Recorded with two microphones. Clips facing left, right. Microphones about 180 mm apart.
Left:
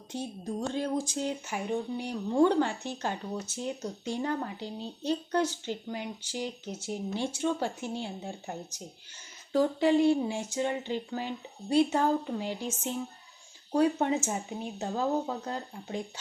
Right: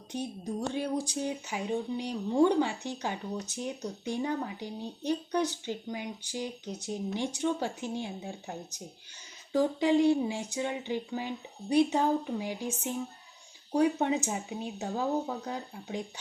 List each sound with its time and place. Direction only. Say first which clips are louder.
0.1 s speech: even; 15° right (ahead or behind)
9.5 s speech: left 1 dB; 15° right (ahead or behind)